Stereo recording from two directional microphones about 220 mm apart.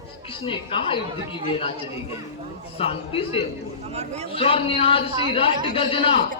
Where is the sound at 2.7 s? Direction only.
25° left (ahead or behind).